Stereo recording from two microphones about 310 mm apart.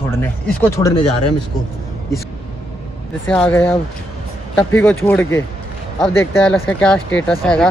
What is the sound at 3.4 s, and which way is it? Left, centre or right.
Speech, centre.